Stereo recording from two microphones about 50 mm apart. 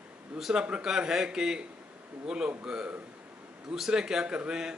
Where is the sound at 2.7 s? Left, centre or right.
Centre.